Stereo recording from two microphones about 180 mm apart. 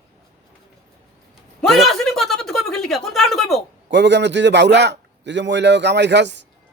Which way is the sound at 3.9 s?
75° right (ahead or behind).